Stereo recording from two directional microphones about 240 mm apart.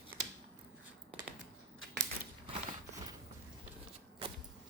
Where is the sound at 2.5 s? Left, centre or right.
Right.